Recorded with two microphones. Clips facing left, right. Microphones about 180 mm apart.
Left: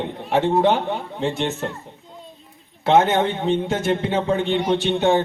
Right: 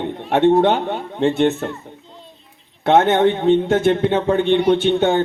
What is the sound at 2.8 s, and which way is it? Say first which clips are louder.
A man's voice: right 3 dB; 60° right (ahead or behind).